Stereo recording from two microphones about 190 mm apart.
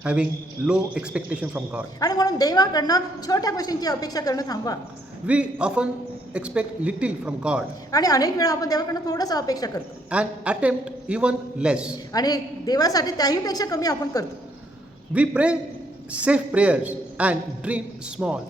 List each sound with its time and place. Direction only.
0.0 s a man's voice: 5° right (ahead or behind)
2.0 s a woman's voice: 20° left (ahead or behind)
5.2 s a man's voice: 5° right (ahead or behind)
7.9 s a woman's voice: 20° left (ahead or behind)
10.1 s a man's voice: 5° right (ahead or behind)
12.1 s a woman's voice: 20° left (ahead or behind)
15.1 s a man's voice: 5° right (ahead or behind)